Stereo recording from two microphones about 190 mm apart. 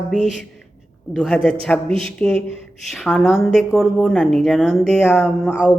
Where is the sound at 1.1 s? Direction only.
5° left (ahead or behind).